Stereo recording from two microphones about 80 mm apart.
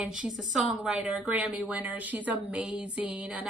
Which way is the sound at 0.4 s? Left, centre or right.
Centre.